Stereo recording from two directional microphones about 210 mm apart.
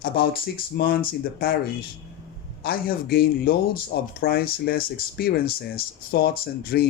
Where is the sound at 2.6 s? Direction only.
45° left (ahead or behind).